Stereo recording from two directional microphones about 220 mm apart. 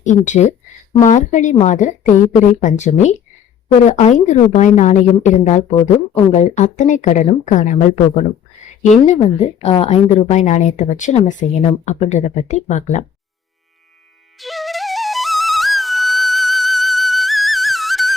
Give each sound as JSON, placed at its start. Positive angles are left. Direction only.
{"t": 0.0, "sound": "a woman's voice", "side_deg": 35}
{"t": 14.3, "sound": "flute", "side_deg": 0}